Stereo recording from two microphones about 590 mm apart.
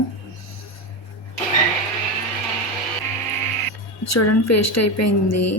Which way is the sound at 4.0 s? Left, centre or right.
Left.